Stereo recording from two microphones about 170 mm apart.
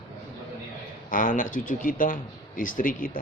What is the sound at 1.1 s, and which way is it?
Speech, 50° left (ahead or behind).